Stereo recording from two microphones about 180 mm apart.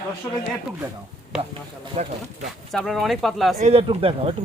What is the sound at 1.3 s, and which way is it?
Speech, 5° right (ahead or behind).